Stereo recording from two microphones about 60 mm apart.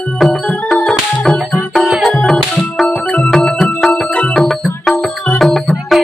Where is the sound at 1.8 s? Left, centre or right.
Centre.